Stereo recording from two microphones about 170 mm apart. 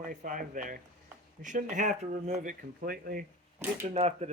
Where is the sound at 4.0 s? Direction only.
40° right (ahead or behind).